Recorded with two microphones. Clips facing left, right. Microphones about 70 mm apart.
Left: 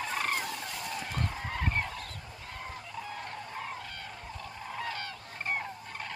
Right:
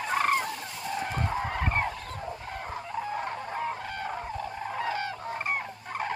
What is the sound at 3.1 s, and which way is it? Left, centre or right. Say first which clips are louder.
Fowl: right 7 dB; right.